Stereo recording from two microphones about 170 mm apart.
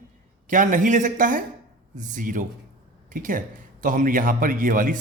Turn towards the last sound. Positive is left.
turn(degrees=-50)  # may be behind; listen again after turning